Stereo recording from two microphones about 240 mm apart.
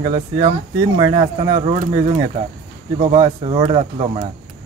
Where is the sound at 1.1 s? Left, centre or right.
Right.